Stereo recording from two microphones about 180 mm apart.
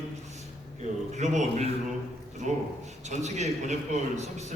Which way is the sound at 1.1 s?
40° right (ahead or behind).